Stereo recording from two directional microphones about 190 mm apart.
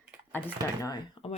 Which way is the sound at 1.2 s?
25° left (ahead or behind).